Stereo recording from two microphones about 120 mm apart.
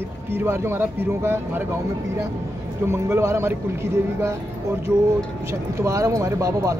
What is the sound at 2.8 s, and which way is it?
Speech, 25° right (ahead or behind).